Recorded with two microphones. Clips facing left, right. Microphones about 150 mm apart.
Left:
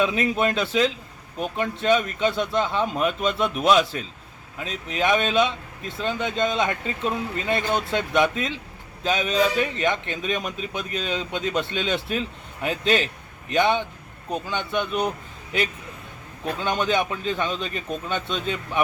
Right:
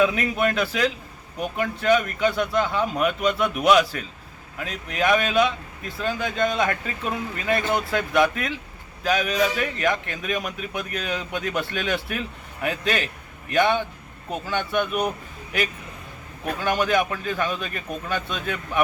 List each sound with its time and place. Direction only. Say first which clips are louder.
0.0 s a man's voice: right 1 dB; 25° left (ahead or behind)
16.5 s a man's voice: right 1 dB; 25° left (ahead or behind)